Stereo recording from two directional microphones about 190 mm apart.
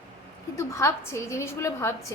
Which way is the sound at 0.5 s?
15° left (ahead or behind).